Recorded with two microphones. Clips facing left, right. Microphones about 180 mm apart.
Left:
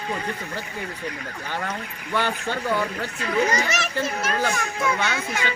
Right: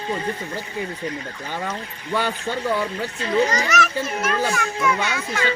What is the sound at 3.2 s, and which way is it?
Speech, 25° right (ahead or behind).